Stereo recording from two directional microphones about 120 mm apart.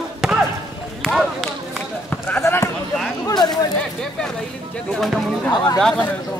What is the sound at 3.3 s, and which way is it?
Speech, 35° left (ahead or behind).